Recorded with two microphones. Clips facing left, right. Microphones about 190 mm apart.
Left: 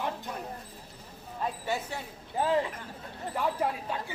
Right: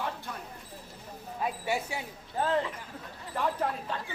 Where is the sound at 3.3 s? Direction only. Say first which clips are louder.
Even; 10° left (ahead or behind).